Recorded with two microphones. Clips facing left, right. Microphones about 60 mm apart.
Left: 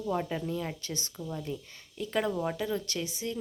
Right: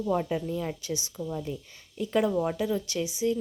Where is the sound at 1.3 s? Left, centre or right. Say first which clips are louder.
Even; centre.